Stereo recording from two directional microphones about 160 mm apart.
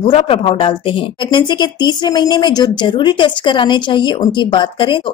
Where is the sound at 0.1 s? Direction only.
35° left (ahead or behind).